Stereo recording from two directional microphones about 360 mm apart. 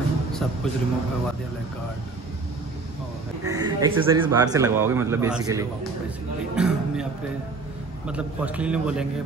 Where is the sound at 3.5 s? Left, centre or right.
Centre.